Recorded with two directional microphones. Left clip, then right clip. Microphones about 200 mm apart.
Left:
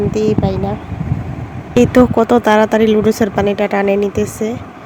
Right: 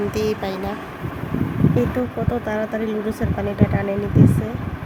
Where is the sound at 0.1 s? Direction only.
30° left (ahead or behind).